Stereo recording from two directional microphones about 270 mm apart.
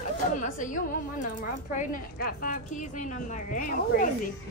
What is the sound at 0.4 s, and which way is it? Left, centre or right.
Speech, left.